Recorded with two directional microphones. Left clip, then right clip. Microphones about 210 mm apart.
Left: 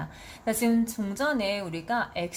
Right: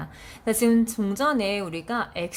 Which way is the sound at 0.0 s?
30° right (ahead or behind).